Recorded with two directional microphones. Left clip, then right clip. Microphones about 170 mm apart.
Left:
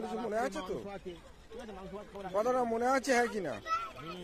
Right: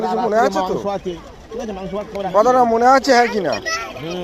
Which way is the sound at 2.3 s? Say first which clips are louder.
Right 18 dB; 65° left (ahead or behind).